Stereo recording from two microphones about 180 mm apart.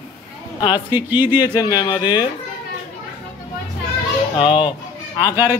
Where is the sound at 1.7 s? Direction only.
25° left (ahead or behind).